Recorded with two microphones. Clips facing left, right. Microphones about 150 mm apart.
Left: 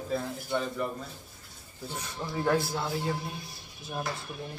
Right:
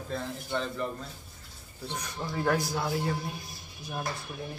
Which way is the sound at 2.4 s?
25° left (ahead or behind).